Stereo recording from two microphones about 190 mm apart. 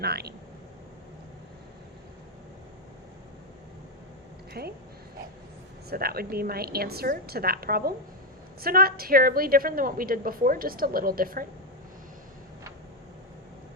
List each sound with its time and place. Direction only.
0.0 s speech: 55° right (ahead or behind)
4.6 s speech: 55° right (ahead or behind)
5.9 s a woman's voice: 55° right (ahead or behind)